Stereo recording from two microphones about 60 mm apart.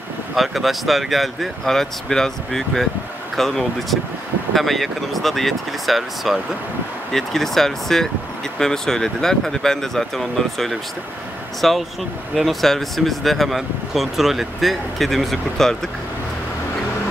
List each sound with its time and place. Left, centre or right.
0.4 s speech: centre